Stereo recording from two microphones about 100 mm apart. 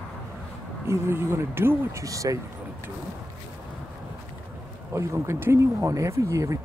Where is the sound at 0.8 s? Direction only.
25° right (ahead or behind).